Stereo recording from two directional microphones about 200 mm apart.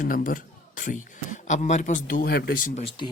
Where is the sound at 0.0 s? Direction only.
45° left (ahead or behind).